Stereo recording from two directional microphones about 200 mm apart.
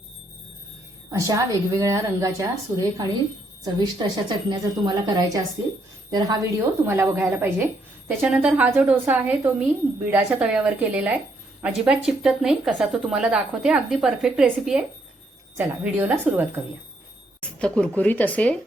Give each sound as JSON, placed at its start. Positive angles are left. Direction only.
{"t": 1.1, "sound": "a woman's voice", "side_deg": -15}
{"t": 17.4, "sound": "speech", "side_deg": 5}